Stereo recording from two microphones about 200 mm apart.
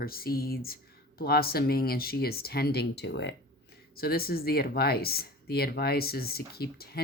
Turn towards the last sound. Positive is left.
turn(degrees=50)  # may be behind; listen again after turning